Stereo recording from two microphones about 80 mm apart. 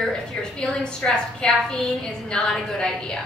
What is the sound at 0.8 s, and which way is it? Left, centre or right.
A woman's voice, centre.